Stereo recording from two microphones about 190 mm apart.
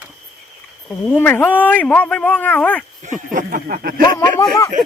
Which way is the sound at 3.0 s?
45° right (ahead or behind).